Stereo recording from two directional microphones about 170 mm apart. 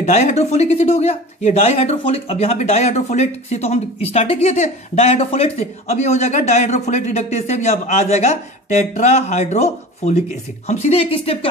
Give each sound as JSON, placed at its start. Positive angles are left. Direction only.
{"t": 0.0, "sound": "speech", "side_deg": 40}